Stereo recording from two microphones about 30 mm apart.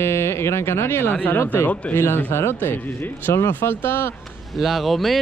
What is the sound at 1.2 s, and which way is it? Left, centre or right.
Speech, left.